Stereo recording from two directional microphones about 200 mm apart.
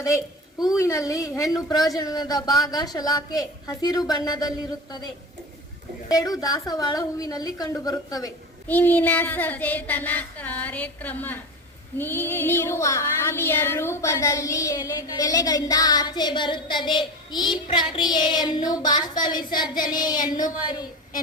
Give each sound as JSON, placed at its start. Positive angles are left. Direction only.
{"t": 0.8, "sound": "a woman's voice", "side_deg": 15}
{"t": 2.0, "sound": "child singing", "side_deg": 20}
{"t": 6.1, "sound": "a woman's voice", "side_deg": 20}
{"t": 11.9, "sound": "child singing", "side_deg": 10}